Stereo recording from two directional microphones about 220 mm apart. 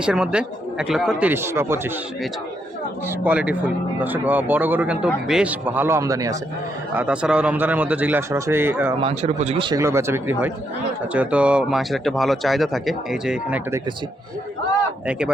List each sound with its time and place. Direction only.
0.0 s speech: 5° right (ahead or behind)
3.2 s speech: 5° right (ahead or behind)
9.0 s speech: 25° right (ahead or behind); by 13.8 s 10° right (ahead or behind)